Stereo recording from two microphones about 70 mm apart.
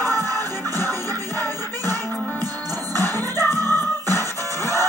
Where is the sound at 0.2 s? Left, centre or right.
Left.